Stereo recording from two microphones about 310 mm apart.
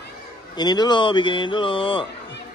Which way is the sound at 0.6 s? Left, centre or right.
Centre.